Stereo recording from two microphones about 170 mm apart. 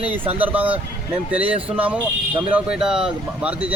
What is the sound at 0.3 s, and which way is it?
Speech, 10° right (ahead or behind).